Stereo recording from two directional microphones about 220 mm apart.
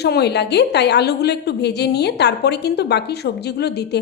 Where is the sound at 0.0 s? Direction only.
50° left (ahead or behind).